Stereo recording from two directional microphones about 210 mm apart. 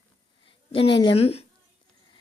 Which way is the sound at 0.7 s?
25° left (ahead or behind).